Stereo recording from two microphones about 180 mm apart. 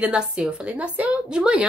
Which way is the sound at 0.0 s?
5° right (ahead or behind).